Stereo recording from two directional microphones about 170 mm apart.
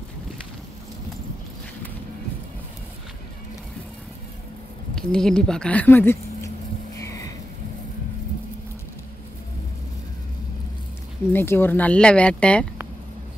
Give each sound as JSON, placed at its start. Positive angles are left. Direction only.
{"t": 4.9, "sound": "speech", "side_deg": 5}
{"t": 7.0, "sound": "a sound", "side_deg": 20}
{"t": 11.3, "sound": "speech", "side_deg": 15}